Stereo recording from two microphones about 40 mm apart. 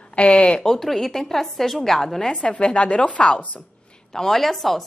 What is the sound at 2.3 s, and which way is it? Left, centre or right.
Speech, left.